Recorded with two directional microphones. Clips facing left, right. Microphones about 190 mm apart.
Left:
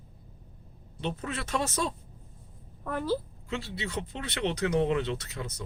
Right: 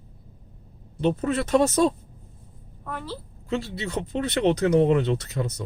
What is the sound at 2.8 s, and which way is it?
Speech, 45° left (ahead or behind).